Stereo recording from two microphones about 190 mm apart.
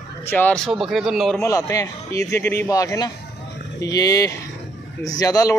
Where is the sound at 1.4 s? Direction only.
15° left (ahead or behind).